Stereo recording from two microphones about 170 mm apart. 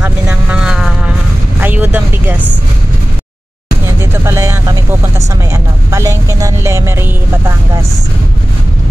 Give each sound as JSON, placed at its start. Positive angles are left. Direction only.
{"t": 0.0, "sound": "vehicle", "side_deg": -5}
{"t": 4.0, "sound": "vehicle", "side_deg": -15}
{"t": 5.5, "sound": "speech", "side_deg": -15}